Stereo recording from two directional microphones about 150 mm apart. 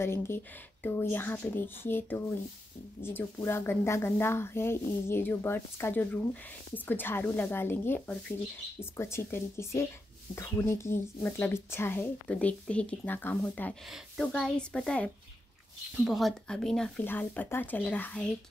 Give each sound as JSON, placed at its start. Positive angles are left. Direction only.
{"t": 0.0, "sound": "speech", "side_deg": 15}